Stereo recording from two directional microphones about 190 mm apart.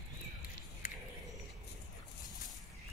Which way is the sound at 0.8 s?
45° left (ahead or behind).